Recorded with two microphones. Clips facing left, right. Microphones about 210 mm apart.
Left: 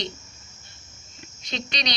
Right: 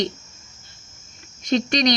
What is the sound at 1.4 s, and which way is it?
Speech, 50° right (ahead or behind).